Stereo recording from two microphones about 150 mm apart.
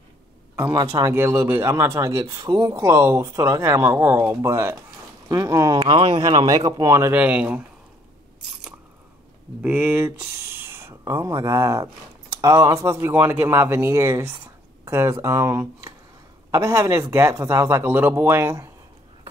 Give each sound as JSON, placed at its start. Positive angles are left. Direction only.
{"t": 0.7, "sound": "speech", "side_deg": -20}
{"t": 9.6, "sound": "speech", "side_deg": -10}